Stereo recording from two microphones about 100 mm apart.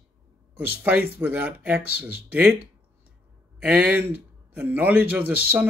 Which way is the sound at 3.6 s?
15° right (ahead or behind).